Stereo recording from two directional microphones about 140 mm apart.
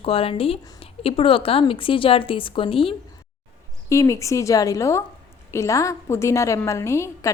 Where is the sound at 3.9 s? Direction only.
20° left (ahead or behind).